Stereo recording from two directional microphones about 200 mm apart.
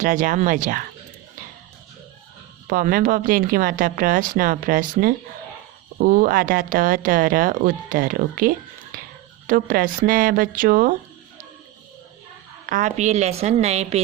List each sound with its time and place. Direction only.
0.0 s a woman's voice: 40° right (ahead or behind)
2.6 s speech: 45° right (ahead or behind)
12.6 s a woman's voice: 40° right (ahead or behind)